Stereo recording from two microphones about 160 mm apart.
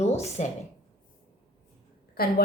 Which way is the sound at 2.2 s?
70° left (ahead or behind).